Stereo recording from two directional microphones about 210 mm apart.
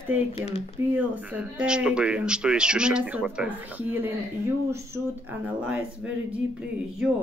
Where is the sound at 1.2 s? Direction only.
5° right (ahead or behind).